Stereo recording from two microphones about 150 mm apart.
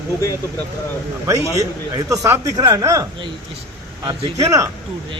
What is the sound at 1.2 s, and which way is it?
Speech, 20° right (ahead or behind).